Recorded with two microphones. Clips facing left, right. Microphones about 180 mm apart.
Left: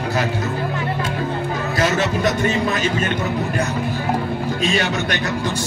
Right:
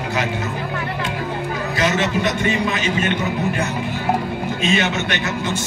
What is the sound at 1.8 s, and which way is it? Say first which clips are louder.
A man's voice: left 1 dB; 40° left (ahead or behind).